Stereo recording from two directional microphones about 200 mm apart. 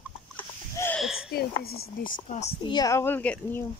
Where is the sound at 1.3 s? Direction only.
50° left (ahead or behind).